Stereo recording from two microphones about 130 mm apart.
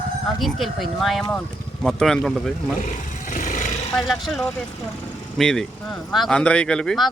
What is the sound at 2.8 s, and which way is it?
Vehicle, 80° left.